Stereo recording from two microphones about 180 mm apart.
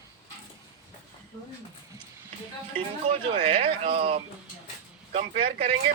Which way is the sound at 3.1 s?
40° right (ahead or behind).